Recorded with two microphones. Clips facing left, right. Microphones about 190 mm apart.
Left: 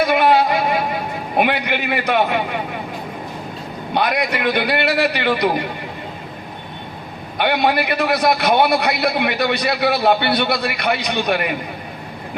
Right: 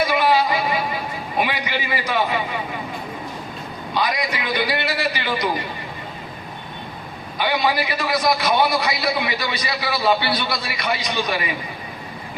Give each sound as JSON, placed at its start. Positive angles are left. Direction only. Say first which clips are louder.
{"t": 0.0, "sound": "a woman's voice", "louder": "left 4 dB", "side_deg": 60}
{"t": 3.9, "sound": "a man's voice", "louder": "left 4 dB", "side_deg": 60}
{"t": 7.3, "sound": "a man's voice", "louder": "left 4 dB", "side_deg": 60}